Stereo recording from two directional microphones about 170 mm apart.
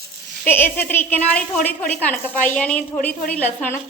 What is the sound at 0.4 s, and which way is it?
A woman's voice, 10° left (ahead or behind).